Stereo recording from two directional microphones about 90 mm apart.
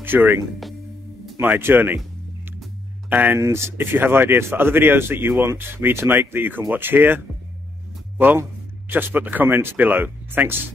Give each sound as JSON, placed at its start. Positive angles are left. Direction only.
{"t": 0.0, "sound": "speech", "side_deg": -20}
{"t": 1.4, "sound": "speech", "side_deg": -20}
{"t": 3.1, "sound": "speech", "side_deg": -20}
{"t": 3.3, "sound": "speech", "side_deg": -30}
{"t": 8.2, "sound": "a man's voice", "side_deg": -25}